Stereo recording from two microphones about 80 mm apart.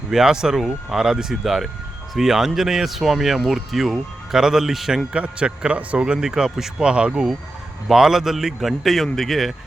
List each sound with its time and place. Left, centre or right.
0.1 s speech: centre
5.1 s speech: centre